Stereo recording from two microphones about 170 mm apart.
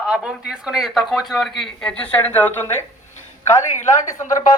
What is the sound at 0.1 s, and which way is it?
A man's voice, 5° right (ahead or behind).